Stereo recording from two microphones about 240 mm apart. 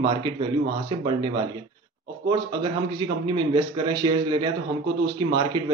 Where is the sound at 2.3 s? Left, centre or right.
Centre.